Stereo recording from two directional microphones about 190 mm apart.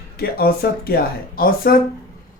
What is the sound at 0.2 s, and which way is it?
Speech, 55° left (ahead or behind).